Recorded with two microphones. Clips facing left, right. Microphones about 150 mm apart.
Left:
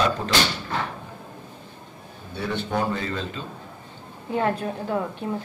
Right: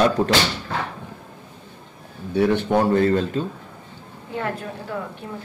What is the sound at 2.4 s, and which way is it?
A man's voice, 60° right (ahead or behind).